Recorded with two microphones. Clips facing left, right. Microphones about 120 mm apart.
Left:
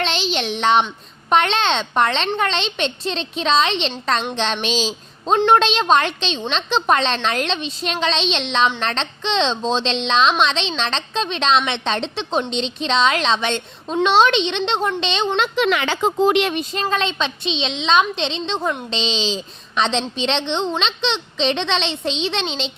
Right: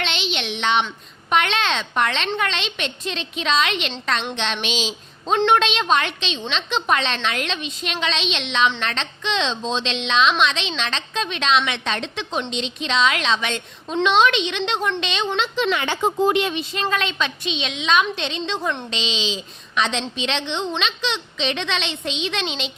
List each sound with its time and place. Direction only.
0.0 s a woman's voice: 35° left (ahead or behind)
15.4 s speech: 60° left (ahead or behind)
16.9 s a woman's voice: 25° left (ahead or behind)